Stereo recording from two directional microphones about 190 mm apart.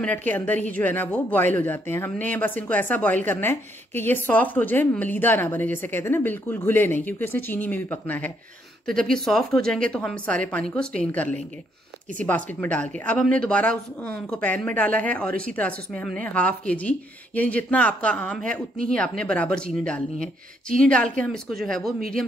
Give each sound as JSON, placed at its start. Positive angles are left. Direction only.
{"t": 0.0, "sound": "a woman's voice", "side_deg": 10}
{"t": 20.2, "sound": "speech", "side_deg": -45}
{"t": 20.8, "sound": "a woman's voice", "side_deg": 5}